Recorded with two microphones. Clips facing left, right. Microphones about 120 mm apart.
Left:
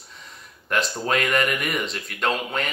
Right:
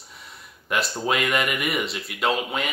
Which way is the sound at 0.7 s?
5° right (ahead or behind).